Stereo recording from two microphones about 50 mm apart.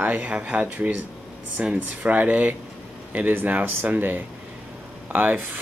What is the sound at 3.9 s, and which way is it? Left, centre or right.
Speech, right.